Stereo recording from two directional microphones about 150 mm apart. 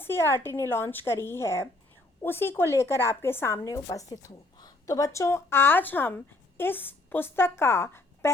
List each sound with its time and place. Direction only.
0.0 s speech: 15° left (ahead or behind)